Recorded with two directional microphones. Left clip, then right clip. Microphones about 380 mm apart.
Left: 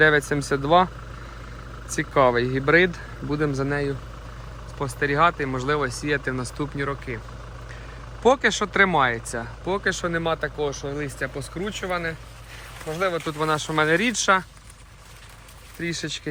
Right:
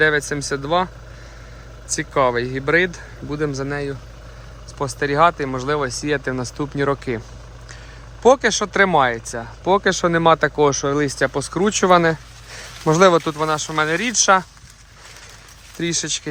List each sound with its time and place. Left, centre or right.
0.0 s speech: centre
1.9 s speech: centre
8.2 s speech: centre
13.2 s speech: centre
15.8 s speech: centre